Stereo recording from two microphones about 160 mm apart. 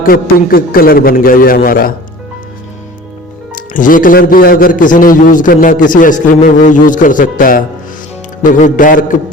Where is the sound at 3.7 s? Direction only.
55° left (ahead or behind).